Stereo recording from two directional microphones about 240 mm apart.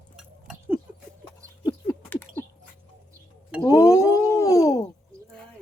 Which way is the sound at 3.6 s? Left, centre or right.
Centre.